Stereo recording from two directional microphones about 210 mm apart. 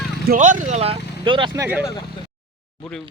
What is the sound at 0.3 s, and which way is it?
Speech, 35° right (ahead or behind).